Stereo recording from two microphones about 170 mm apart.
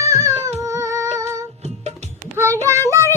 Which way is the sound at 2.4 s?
15° right (ahead or behind).